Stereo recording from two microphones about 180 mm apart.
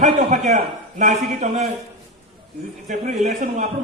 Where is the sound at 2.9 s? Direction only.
40° right (ahead or behind).